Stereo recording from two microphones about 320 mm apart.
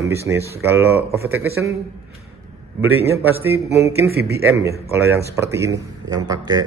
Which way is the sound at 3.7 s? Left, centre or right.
Centre.